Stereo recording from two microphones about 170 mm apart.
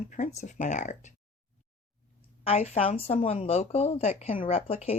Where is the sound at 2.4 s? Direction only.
40° left (ahead or behind).